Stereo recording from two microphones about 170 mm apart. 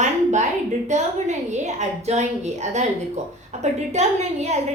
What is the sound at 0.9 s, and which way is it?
A woman's voice, 45° right (ahead or behind).